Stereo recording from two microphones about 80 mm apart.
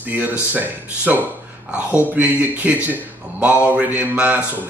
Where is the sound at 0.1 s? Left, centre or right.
Right.